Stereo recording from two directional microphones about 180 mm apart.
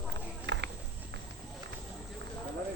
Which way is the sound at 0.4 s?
70° right (ahead or behind).